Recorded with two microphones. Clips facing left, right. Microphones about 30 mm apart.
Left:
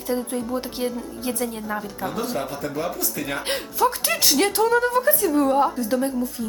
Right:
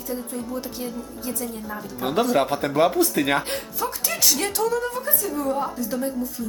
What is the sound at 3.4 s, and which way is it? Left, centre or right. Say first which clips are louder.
Speech: left 6 dB; left.